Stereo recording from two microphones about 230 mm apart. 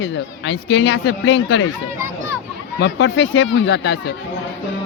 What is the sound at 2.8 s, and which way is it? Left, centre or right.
Speech, left.